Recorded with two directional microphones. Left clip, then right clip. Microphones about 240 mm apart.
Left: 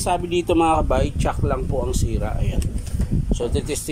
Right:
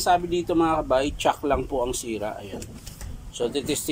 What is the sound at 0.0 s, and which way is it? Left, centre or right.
Speech, centre.